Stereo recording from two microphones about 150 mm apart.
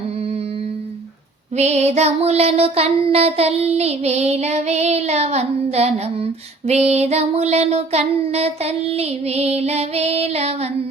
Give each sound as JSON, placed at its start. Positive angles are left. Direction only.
{"t": 1.5, "sound": "child singing", "side_deg": -45}